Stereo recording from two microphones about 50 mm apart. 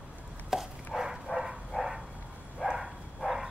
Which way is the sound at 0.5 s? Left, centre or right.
Centre.